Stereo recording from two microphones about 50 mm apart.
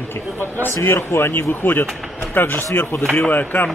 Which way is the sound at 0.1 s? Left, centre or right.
Left.